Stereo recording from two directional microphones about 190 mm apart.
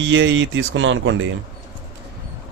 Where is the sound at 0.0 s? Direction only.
75° right (ahead or behind).